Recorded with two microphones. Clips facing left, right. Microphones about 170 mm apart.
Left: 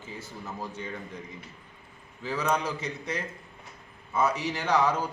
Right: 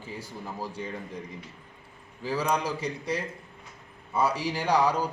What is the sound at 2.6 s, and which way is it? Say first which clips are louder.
Speech: right 3 dB; 35° right (ahead or behind).